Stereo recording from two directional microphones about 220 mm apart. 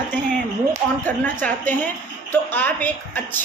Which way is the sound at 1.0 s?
5° left (ahead or behind).